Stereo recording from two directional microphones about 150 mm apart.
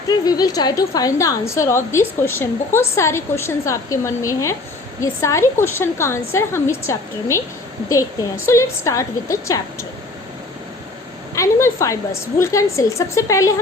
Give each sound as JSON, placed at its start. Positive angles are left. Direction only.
{"t": 0.1, "sound": "a woman's voice", "side_deg": 25}
{"t": 8.4, "sound": "a woman's voice", "side_deg": 20}
{"t": 11.3, "sound": "a woman's voice", "side_deg": 20}